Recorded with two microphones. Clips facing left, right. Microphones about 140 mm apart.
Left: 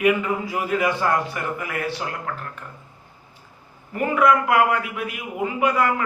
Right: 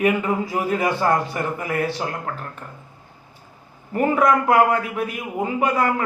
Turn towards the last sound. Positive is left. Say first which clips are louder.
# even
turn(degrees=-35)  # may be behind; listen again after turning